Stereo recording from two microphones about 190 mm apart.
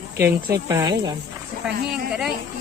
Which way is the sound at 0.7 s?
20° right (ahead or behind).